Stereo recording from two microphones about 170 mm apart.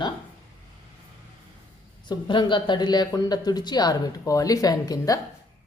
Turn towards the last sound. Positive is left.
turn(degrees=20)  # may be behind; listen again after turning